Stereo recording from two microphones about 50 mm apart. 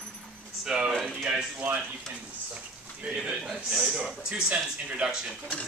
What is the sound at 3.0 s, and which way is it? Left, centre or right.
Speech, centre.